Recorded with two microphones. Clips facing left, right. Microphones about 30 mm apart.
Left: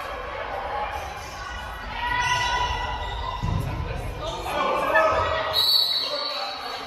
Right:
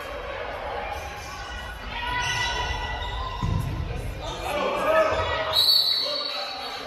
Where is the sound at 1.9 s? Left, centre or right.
Centre.